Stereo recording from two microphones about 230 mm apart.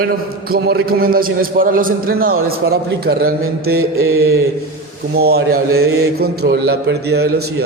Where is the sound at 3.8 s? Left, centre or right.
Right.